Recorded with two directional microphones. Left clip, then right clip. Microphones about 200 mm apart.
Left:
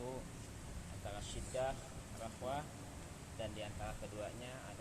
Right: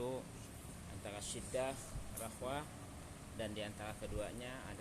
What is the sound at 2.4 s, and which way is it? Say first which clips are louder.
Speech: left 1 dB; 45° right (ahead or behind).